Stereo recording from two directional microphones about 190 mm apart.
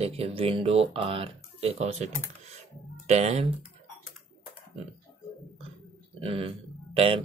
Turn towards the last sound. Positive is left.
turn(degrees=-30)  # may be behind; listen again after turning